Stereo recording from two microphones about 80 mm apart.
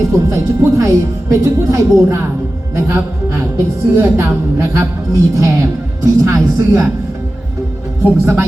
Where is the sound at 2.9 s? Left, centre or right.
Right.